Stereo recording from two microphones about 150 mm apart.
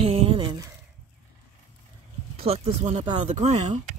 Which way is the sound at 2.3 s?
40° right (ahead or behind).